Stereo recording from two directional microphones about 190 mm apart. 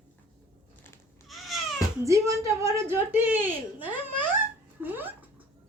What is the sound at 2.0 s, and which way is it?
A woman's voice, 15° right (ahead or behind).